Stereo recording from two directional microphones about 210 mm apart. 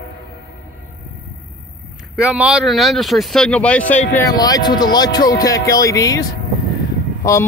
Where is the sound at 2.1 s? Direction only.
5° right (ahead or behind).